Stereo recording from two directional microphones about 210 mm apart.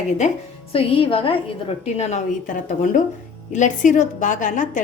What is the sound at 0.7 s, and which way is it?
A woman's voice, 25° left (ahead or behind).